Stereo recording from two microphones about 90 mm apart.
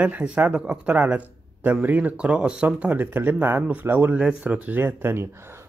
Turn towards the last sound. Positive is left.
turn(degrees=-25)  # may be behind; listen again after turning